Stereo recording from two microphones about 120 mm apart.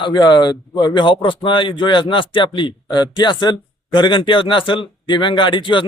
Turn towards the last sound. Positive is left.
turn(degrees=45)  # may be behind; listen again after turning